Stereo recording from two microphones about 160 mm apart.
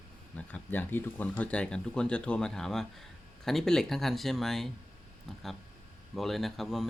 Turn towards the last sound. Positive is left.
turn(degrees=0)  # may be behind; listen again after turning